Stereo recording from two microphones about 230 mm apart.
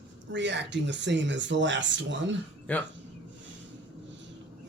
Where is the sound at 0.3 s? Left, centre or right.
Right.